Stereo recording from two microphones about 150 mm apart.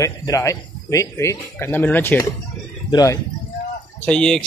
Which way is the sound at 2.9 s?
25° left (ahead or behind).